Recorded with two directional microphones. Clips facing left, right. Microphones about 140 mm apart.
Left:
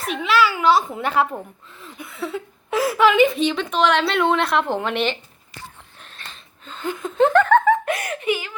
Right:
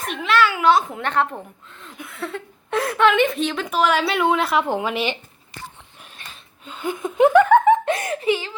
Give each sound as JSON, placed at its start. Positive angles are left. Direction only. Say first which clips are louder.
{"t": 0.1, "sound": "a woman's voice", "louder": "even", "side_deg": 0}
{"t": 6.0, "sound": "a sound", "louder": "left 1 dB", "side_deg": -10}
{"t": 6.7, "sound": "giggle", "louder": "right 1 dB", "side_deg": -10}